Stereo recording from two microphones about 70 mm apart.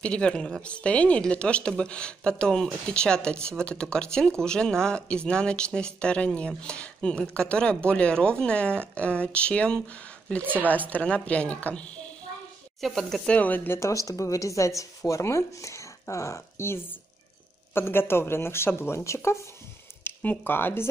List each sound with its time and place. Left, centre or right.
0.0 s speech: centre
10.4 s speech: right
10.7 s a woman's voice: left
12.8 s speech: centre
13.3 s a woman's voice: left
13.7 s speech: left
20.0 s speech: left